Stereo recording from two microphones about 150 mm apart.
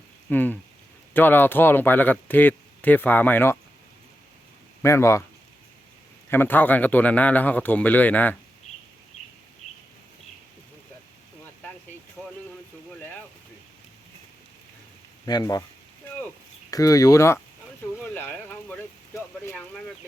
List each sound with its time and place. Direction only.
0.3 s speech: 10° left (ahead or behind)
4.8 s speech: 20° left (ahead or behind)
6.3 s speech: 15° left (ahead or behind)
15.3 s speech: 25° left (ahead or behind)
16.7 s speech: 25° left (ahead or behind)
18.0 s a sound: 10° left (ahead or behind)